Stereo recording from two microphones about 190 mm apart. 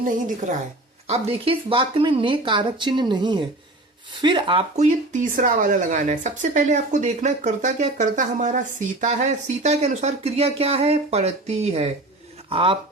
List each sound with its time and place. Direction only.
0.0 s a woman's voice: 45° right (ahead or behind); by 12.7 s 30° right (ahead or behind)